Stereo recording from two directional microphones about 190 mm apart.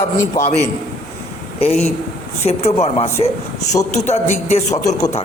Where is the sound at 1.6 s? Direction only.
35° left (ahead or behind).